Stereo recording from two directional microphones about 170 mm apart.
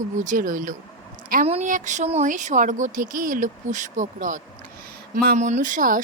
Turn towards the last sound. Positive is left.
turn(degrees=-50)  # may be behind; listen again after turning